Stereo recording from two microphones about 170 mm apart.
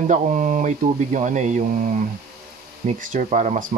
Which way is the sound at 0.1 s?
50° right (ahead or behind).